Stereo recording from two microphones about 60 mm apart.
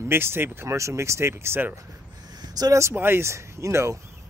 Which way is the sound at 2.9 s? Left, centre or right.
Right.